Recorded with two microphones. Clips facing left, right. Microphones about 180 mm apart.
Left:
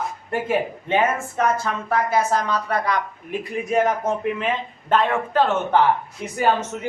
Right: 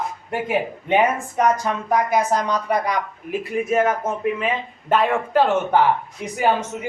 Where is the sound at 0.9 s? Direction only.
15° right (ahead or behind).